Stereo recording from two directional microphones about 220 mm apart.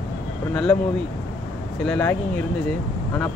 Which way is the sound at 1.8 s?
5° left (ahead or behind).